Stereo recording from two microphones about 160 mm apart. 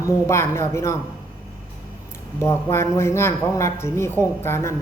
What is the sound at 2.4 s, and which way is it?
A woman's voice, 15° left (ahead or behind).